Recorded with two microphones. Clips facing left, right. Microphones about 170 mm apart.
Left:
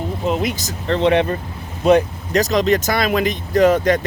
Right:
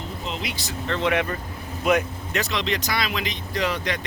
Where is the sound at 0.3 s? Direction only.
50° left (ahead or behind).